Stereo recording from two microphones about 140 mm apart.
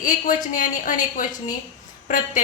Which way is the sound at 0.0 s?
65° left (ahead or behind).